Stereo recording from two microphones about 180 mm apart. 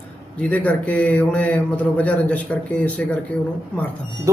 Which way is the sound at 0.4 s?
10° left (ahead or behind).